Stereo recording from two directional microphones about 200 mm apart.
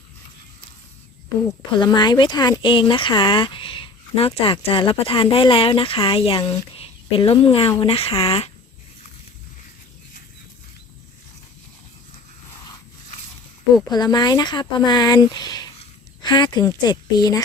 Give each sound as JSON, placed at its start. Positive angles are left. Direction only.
{"t": 1.5, "sound": "a woman's voice", "side_deg": 20}
{"t": 13.9, "sound": "speech", "side_deg": 20}